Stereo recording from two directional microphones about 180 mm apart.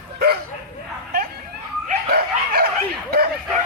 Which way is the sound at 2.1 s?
55° right (ahead or behind).